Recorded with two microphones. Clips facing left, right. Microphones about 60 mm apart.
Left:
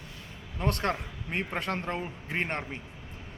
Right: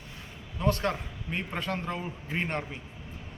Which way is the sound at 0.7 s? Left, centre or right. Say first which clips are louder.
Right 2 dB; left.